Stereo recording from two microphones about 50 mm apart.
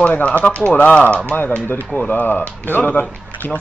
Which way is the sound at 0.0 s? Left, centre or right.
Left.